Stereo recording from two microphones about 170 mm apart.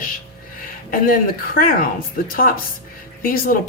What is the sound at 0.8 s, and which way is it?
Speech, 55° left (ahead or behind).